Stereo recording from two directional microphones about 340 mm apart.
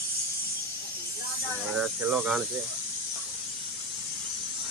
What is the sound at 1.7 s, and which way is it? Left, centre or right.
Speech, centre.